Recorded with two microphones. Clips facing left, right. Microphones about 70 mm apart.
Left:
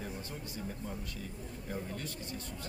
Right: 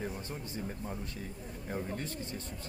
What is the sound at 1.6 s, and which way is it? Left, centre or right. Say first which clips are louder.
Speech: right 3 dB; right.